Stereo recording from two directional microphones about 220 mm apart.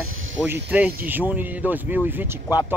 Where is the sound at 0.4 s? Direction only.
5° right (ahead or behind).